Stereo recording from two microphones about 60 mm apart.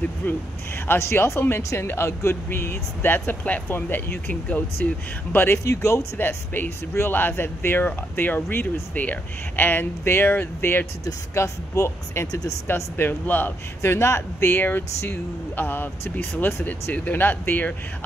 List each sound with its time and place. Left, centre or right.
0.2 s speech: left
4.3 s speech: left
4.8 s speech: left
5.6 s speech: left
6.1 s speech: left
8.9 s speech: left
11.3 s speech: left
12.3 s speech: left
12.6 s speech: left
13.9 s speech: left
14.5 s speech: left
16.9 s speech: left